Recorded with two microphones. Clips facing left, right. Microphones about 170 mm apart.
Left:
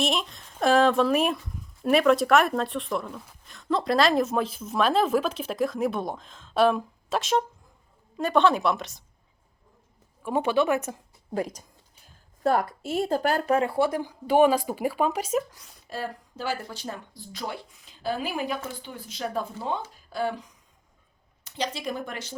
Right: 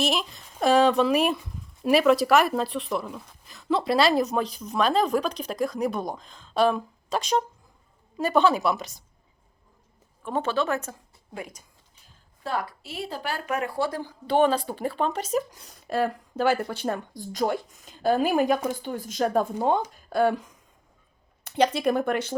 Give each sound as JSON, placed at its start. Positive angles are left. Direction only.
{"t": 0.0, "sound": "a woman's voice", "side_deg": 0}
{"t": 10.2, "sound": "speech", "side_deg": 15}
{"t": 12.4, "sound": "speech", "side_deg": 50}
{"t": 13.5, "sound": "speech", "side_deg": 25}
{"t": 14.3, "sound": "speech", "side_deg": 10}
{"t": 15.9, "sound": "a woman's voice", "side_deg": -60}